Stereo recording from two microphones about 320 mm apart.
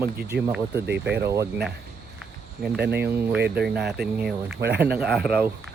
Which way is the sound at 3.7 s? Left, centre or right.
Right.